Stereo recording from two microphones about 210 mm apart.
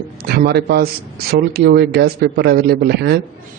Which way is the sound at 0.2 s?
50° right (ahead or behind).